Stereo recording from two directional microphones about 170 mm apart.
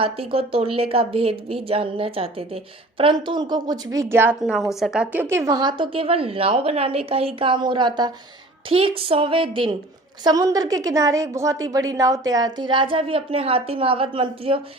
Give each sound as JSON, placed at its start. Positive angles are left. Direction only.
{"t": 0.0, "sound": "a woman's voice", "side_deg": -35}
{"t": 4.4, "sound": "a woman's voice", "side_deg": 0}